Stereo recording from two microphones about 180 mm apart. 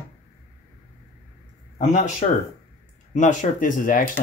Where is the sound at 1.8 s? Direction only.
40° left (ahead or behind).